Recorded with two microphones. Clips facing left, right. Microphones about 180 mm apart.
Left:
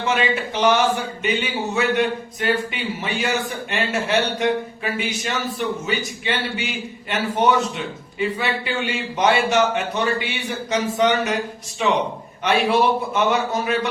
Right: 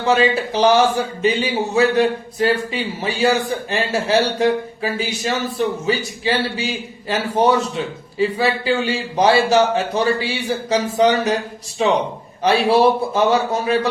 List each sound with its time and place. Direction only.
0.0 s speech: 35° right (ahead or behind)